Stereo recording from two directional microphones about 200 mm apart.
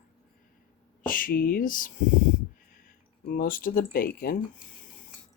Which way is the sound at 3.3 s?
45° left (ahead or behind).